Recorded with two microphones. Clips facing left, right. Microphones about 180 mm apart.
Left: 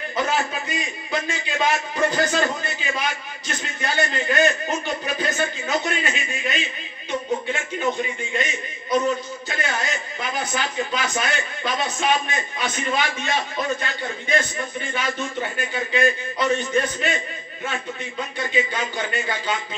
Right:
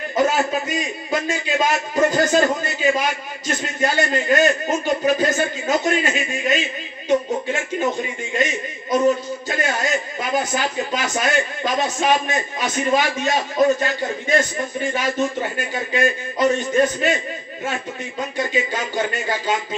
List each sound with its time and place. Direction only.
0.1 s speech: 45° right (ahead or behind)
9.0 s a man's voice: 40° right (ahead or behind)
18.4 s speech: 40° right (ahead or behind)